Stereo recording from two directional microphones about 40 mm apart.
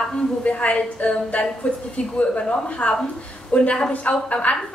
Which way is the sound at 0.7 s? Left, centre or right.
Left.